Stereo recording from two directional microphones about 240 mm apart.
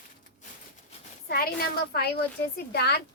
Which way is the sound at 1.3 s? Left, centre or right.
Left.